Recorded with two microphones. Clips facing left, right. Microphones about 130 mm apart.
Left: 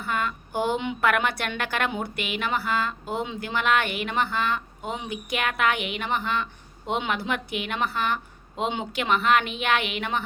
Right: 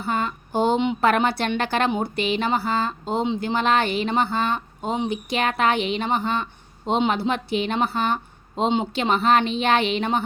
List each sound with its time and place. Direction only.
0.0 s speech: 30° right (ahead or behind)